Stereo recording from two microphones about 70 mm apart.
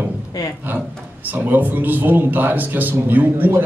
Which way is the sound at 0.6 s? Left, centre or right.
Right.